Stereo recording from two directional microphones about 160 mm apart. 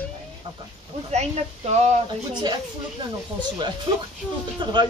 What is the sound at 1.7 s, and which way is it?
Speech, 45° right (ahead or behind).